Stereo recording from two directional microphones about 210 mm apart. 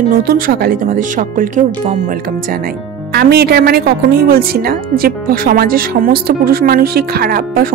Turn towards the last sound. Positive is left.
turn(degrees=-45)  # may be behind; listen again after turning